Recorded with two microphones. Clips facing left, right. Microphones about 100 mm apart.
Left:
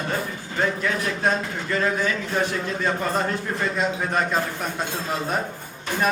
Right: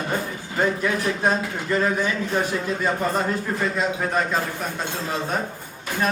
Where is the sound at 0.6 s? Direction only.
15° right (ahead or behind).